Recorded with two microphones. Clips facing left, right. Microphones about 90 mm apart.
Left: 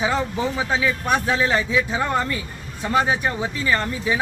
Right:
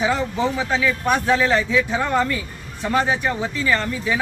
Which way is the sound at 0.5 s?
15° left (ahead or behind).